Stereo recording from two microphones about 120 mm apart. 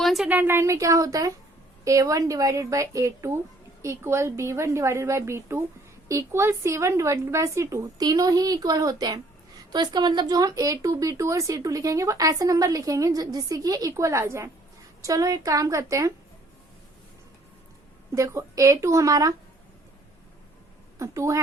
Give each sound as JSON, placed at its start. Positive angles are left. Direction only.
{"t": 0.0, "sound": "a sound", "side_deg": 0}
{"t": 0.3, "sound": "speech", "side_deg": -15}
{"t": 18.1, "sound": "speech", "side_deg": -25}
{"t": 21.0, "sound": "speech", "side_deg": -25}